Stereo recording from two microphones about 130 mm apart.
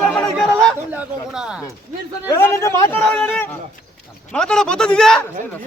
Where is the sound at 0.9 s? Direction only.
10° right (ahead or behind).